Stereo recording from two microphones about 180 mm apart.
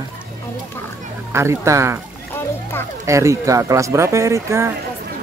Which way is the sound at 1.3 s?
15° right (ahead or behind).